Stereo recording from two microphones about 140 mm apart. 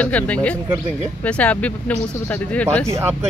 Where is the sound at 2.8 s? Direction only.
20° right (ahead or behind).